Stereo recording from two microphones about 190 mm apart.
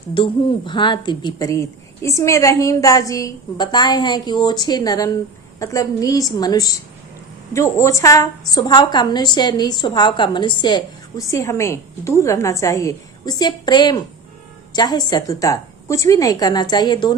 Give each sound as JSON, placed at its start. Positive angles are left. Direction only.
{"t": 0.1, "sound": "a woman's voice", "side_deg": 25}